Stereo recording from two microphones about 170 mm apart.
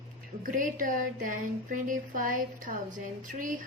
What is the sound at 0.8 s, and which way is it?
A woman's voice, 50° right (ahead or behind).